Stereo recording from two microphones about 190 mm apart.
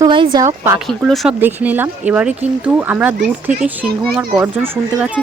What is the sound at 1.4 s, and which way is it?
Speech, 10° right (ahead or behind).